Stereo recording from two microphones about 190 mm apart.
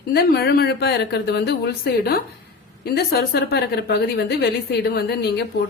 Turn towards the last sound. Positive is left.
turn(degrees=55)  # may be behind; listen again after turning